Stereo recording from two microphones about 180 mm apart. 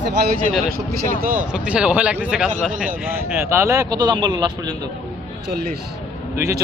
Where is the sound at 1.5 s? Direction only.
5° right (ahead or behind); by 4.9 s 20° right (ahead or behind).